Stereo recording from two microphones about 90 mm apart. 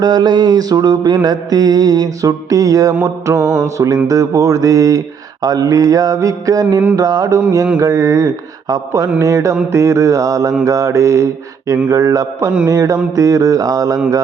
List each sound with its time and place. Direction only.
0.0 s mantra: 50° right (ahead or behind)
3.0 s speech: 35° right (ahead or behind)